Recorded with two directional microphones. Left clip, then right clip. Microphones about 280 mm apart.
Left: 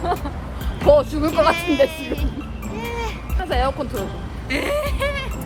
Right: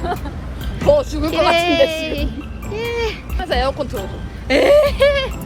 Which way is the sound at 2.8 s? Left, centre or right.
Centre.